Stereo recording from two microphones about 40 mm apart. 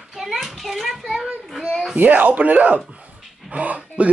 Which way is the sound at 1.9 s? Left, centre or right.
Right.